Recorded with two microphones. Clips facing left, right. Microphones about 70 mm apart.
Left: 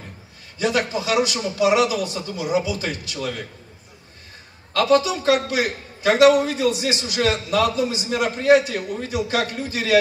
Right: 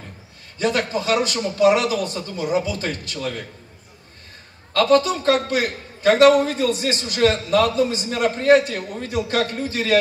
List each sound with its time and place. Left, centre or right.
0.6 s a man's voice: right
4.7 s a man's voice: right